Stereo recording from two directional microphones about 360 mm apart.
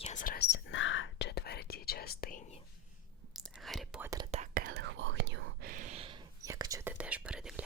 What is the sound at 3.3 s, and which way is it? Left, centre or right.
Whispering, centre.